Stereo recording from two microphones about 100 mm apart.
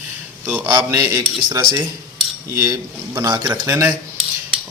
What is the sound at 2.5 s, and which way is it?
Speech, 30° right (ahead or behind).